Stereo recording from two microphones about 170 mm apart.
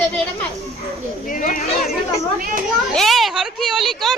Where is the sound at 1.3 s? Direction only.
50° left (ahead or behind).